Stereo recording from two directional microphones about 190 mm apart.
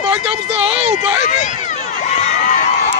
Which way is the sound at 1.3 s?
40° left (ahead or behind).